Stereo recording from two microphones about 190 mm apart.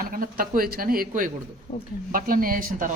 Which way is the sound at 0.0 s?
50° right (ahead or behind).